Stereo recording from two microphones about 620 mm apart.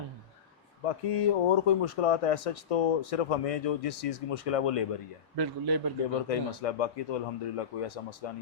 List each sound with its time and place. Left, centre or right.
0.9 s speech: left
5.4 s a man's voice: right
6.2 s speech: left